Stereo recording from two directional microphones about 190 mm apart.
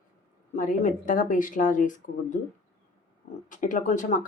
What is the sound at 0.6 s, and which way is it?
Speech, 45° left (ahead or behind).